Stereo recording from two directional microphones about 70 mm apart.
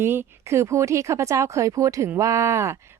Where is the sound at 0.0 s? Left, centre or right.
Right.